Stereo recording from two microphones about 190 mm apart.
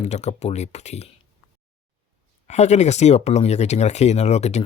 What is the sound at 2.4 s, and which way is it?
Speech, 35° left (ahead or behind).